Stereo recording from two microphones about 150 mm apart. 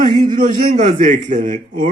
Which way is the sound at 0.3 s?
65° right (ahead or behind).